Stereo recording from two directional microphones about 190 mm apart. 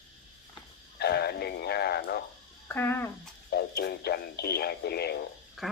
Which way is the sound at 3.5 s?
55° left (ahead or behind).